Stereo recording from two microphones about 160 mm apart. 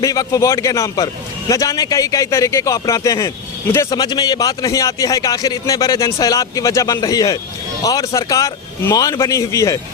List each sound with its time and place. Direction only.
0.0 s a man's voice: 20° left (ahead or behind)